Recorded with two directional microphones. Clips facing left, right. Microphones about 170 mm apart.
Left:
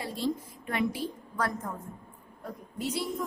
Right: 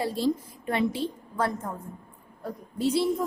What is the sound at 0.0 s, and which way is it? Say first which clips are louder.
A woman's voice: right 5 dB; 35° right (ahead or behind).